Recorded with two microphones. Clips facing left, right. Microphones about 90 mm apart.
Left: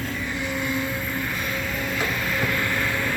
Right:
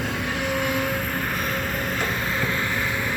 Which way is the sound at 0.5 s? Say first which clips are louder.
Right 2 dB; 65° right (ahead or behind).